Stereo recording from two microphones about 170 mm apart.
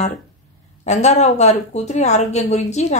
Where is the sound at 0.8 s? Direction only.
40° left (ahead or behind).